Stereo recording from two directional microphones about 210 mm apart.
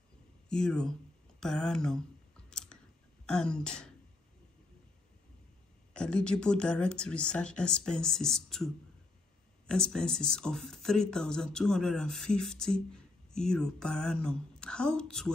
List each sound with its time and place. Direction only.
0.5 s speech: 5° left (ahead or behind)
2.5 s chewing: 5° left (ahead or behind)
3.3 s speech: 5° left (ahead or behind)
5.9 s speech: 5° left (ahead or behind)